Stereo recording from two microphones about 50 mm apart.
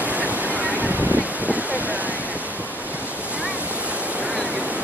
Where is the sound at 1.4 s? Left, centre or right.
Right.